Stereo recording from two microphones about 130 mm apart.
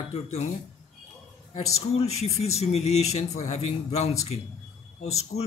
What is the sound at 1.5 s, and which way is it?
Speech, 55° left (ahead or behind).